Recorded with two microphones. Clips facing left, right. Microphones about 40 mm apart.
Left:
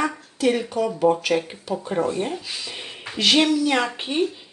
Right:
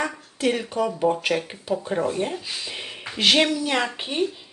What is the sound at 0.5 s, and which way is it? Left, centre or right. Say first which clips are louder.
Speech: left 2 dB; centre.